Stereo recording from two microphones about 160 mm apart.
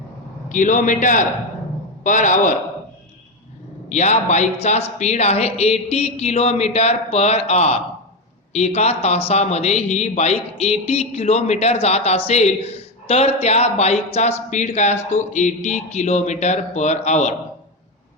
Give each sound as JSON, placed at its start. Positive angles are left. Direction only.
{"t": 0.4, "sound": "speech", "side_deg": 55}
{"t": 3.8, "sound": "speech", "side_deg": 45}